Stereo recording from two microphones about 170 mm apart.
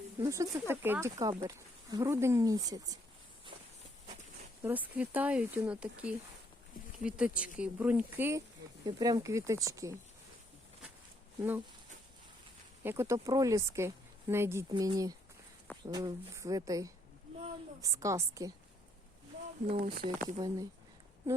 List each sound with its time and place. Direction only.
0.2 s speech: 20° right (ahead or behind)
4.6 s speech: 10° right (ahead or behind)
12.8 s speech: 15° right (ahead or behind)
19.7 s speech: 60° right (ahead or behind)
20.3 s speech: 20° right (ahead or behind)